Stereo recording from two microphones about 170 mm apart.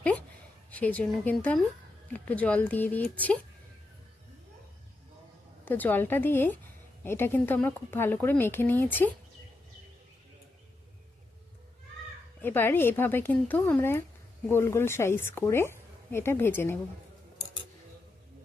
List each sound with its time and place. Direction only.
0.0 s a sound: 10° left (ahead or behind)
0.7 s a woman's voice: 10° left (ahead or behind)
5.6 s a woman's voice: 10° left (ahead or behind)
12.4 s a woman's voice: 10° left (ahead or behind)